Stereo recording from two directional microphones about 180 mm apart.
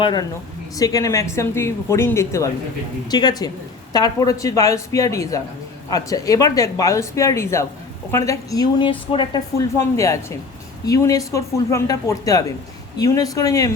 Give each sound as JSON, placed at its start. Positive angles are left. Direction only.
{"t": 0.0, "sound": "a woman's voice", "side_deg": 25}
{"t": 9.6, "sound": "a woman's voice", "side_deg": 15}